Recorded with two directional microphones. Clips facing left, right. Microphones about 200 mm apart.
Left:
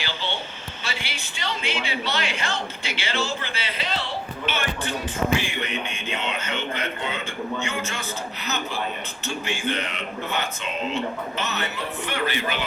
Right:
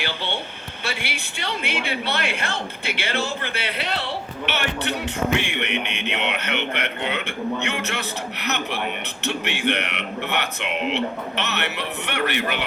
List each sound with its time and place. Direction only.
0.0 s a woman's voice: 60° right (ahead or behind)
4.4 s music: 70° right (ahead or behind)